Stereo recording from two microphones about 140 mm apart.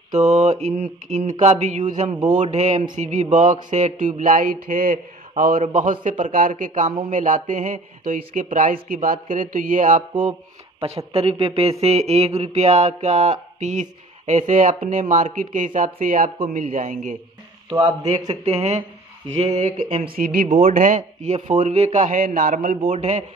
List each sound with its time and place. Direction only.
0.1 s mantra: 55° right (ahead or behind)
2.0 s speech: 30° right (ahead or behind)
2.3 s mantra: 55° right (ahead or behind)
3.7 s speech: 65° right (ahead or behind)
10.8 s speech: 45° right (ahead or behind)
11.8 s mantra: 50° right (ahead or behind); by 14.8 s 65° right (ahead or behind)
14.9 s speech: 65° right (ahead or behind)
18.3 s speech: 50° right (ahead or behind)
20.1 s speech: 90° right
20.5 s mantra: 60° right (ahead or behind)
22.8 s mantra: 55° right (ahead or behind)